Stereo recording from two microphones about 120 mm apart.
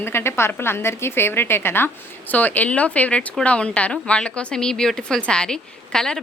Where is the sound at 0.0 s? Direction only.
20° left (ahead or behind).